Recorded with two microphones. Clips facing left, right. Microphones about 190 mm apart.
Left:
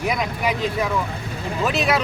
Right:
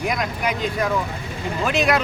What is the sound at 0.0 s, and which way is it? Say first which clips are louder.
Speech: left 1 dB; centre (ahead or behind).